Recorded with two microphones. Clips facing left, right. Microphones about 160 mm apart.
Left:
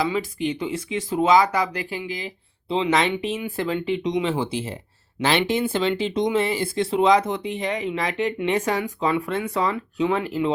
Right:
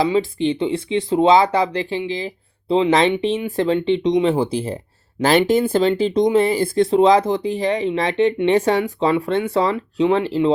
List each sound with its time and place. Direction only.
0.0 s speech: 30° right (ahead or behind)